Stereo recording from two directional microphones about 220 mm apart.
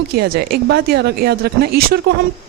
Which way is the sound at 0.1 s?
45° right (ahead or behind).